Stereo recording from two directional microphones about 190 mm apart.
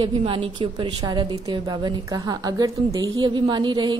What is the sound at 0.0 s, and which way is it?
A woman's voice, 30° right (ahead or behind).